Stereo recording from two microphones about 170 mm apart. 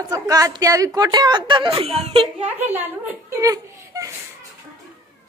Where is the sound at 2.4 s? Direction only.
10° right (ahead or behind).